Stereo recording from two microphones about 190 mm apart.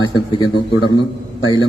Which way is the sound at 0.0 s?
20° left (ahead or behind).